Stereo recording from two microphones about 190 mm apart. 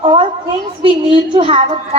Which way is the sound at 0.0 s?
25° right (ahead or behind).